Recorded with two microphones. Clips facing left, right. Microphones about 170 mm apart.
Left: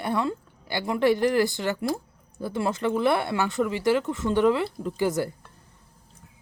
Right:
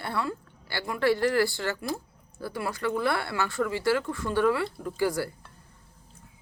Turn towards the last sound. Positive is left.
turn(degrees=20)  # may be behind; listen again after turning